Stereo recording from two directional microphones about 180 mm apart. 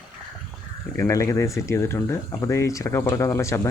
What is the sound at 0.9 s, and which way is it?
Speech, 15° left (ahead or behind).